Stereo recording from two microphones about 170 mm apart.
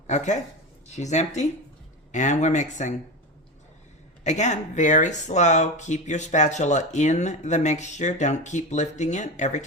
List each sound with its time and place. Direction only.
0.1 s speech: 45° left (ahead or behind)
4.2 s speech: 45° left (ahead or behind)